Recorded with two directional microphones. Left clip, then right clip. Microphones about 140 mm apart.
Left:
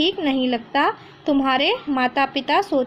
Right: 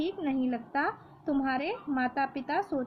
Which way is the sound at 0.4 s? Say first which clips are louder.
Left 12 dB; 50° left (ahead or behind).